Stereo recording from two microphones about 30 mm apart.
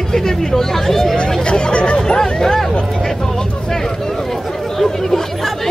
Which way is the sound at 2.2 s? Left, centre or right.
Centre.